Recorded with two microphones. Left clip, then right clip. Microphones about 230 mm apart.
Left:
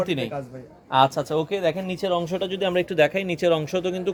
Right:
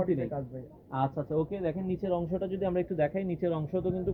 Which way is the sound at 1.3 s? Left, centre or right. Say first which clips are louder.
Left 8 dB; left.